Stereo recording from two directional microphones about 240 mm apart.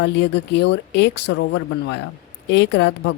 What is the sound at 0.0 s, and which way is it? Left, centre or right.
Speech, left.